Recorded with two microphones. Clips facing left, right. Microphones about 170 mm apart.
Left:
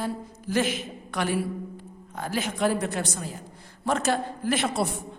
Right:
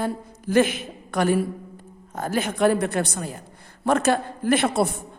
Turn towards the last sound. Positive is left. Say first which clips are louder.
# right 5 dB
turn(degrees=-55)  # may be behind; listen again after turning